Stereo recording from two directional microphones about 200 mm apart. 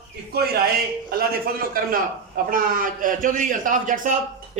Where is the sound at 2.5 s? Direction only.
45° right (ahead or behind).